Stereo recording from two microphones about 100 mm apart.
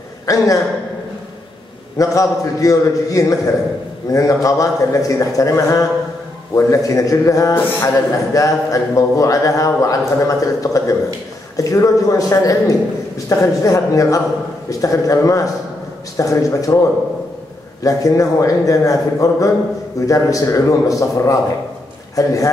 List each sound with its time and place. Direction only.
0.3 s a man's voice: 35° left (ahead or behind)
2.0 s a man's voice: 35° left (ahead or behind)
17.8 s a man's voice: 35° left (ahead or behind)